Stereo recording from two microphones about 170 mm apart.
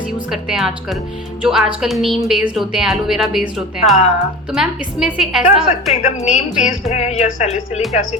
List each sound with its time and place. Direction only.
0.3 s a woman's voice: centre (ahead or behind)
5.9 s a woman's voice: 40° left (ahead or behind)